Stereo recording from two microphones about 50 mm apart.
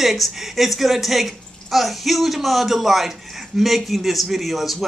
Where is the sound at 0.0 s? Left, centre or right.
Centre.